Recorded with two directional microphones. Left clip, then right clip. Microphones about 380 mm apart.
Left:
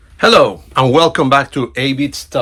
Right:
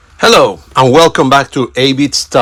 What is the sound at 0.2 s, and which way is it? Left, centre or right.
Speech, centre.